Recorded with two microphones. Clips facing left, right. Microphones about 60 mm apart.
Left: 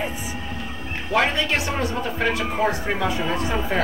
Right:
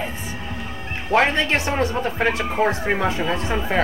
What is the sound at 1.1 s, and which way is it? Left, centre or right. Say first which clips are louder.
Speech: right 3 dB; right.